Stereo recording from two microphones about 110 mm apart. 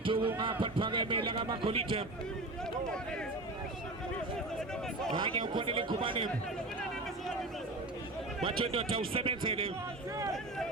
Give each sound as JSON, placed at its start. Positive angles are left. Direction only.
{"t": 0.0, "sound": "a sound", "side_deg": -50}
{"t": 0.6, "sound": "a man's voice", "side_deg": -50}
{"t": 5.1, "sound": "a man's voice", "side_deg": -45}
{"t": 8.4, "sound": "speech", "side_deg": -55}